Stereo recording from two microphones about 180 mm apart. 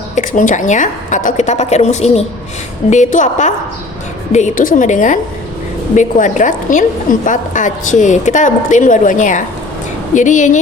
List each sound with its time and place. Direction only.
0.2 s a woman's voice: 45° left (ahead or behind)